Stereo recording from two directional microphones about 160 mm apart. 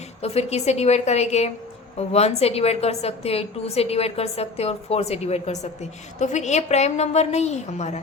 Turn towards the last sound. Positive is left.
turn(degrees=45)  # may be behind; listen again after turning